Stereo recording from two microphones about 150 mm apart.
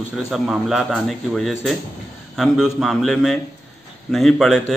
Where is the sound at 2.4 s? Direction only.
Centre (ahead or behind).